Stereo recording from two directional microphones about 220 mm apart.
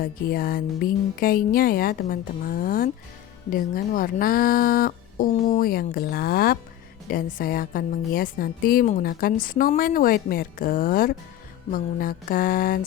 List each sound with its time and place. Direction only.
0.0 s a woman's voice: 40° left (ahead or behind)